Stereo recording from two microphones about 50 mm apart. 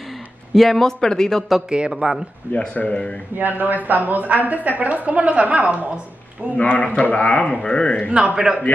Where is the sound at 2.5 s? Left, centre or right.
Left.